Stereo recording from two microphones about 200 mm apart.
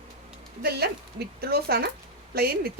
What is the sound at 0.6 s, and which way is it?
A woman's voice, 50° right (ahead or behind).